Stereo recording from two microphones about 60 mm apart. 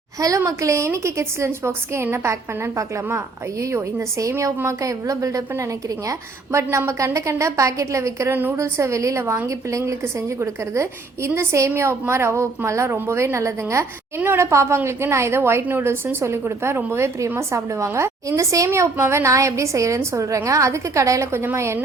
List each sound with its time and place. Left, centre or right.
0.2 s a woman's voice: right
0.9 s a woman's voice: right
4.2 s a woman's voice: right
6.1 s a woman's voice: right
8.3 s a woman's voice: right
8.5 s a woman's voice: right
17.5 s a woman's voice: right
21.3 s a woman's voice: right